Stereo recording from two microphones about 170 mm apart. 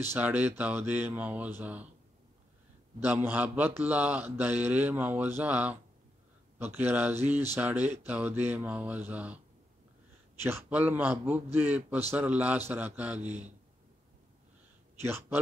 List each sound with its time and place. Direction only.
0.0 s a man's voice: 10° right (ahead or behind)
3.0 s a man's voice: 10° right (ahead or behind)
10.4 s a man's voice: 10° right (ahead or behind)
13.2 s speech: 40° right (ahead or behind)
15.0 s a man's voice: 15° right (ahead or behind)